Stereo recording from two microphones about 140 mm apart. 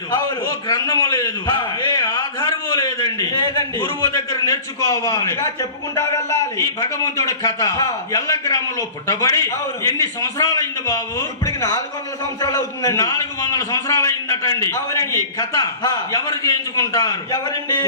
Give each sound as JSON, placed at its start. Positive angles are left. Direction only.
{"t": 0.7, "sound": "a man's voice", "side_deg": 25}